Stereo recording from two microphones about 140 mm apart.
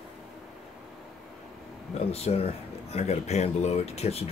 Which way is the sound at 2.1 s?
50° left (ahead or behind).